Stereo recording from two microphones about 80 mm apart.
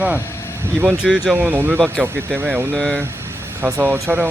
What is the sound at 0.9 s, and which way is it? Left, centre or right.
Speech, centre.